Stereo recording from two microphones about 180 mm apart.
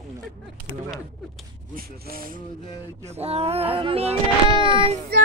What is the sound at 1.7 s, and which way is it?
Speech, 55° right (ahead or behind).